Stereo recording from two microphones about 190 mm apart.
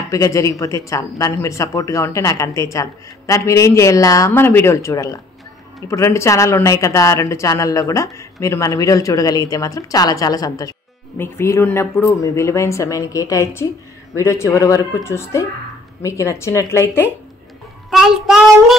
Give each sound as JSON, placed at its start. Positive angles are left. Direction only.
{"t": 0.1, "sound": "speech", "side_deg": 15}
{"t": 17.8, "sound": "child singing", "side_deg": 0}